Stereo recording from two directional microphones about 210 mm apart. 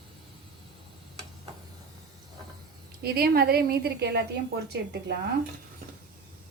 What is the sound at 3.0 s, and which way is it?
A woman's voice, 45° right (ahead or behind).